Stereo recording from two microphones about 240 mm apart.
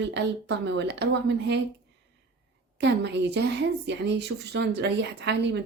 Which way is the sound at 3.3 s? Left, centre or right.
Right.